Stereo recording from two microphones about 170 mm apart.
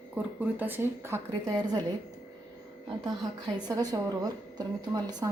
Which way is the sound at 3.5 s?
20° right (ahead or behind).